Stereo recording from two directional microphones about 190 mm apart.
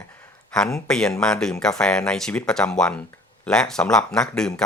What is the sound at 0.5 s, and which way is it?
Speech, 5° left (ahead or behind).